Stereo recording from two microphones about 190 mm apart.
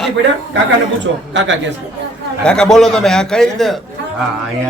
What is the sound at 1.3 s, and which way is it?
Speech, 75° right (ahead or behind).